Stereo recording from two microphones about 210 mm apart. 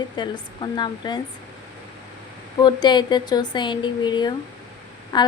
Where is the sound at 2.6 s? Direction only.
20° left (ahead or behind).